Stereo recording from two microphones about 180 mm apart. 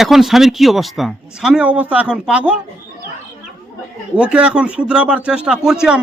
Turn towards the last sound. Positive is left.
turn(degrees=-5)  # may be behind; listen again after turning